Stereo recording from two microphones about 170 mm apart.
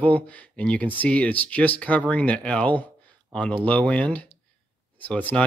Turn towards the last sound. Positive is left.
turn(degrees=10)  # may be behind; listen again after turning